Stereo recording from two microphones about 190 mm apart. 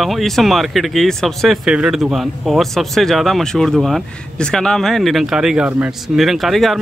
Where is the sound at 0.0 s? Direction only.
Centre (ahead or behind).